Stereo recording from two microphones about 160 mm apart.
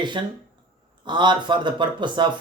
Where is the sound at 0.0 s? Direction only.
30° right (ahead or behind).